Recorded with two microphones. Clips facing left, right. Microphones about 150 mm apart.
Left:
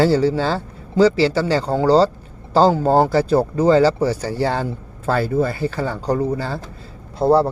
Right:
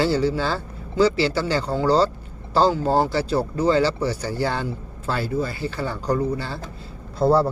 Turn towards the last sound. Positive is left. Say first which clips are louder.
# left 3 dB
turn(degrees=20)  # may be behind; listen again after turning